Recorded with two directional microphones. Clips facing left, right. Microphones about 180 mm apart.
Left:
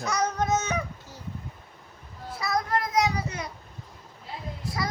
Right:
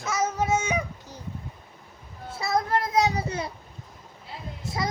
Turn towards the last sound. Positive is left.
turn(degrees=-25)  # may be behind; listen again after turning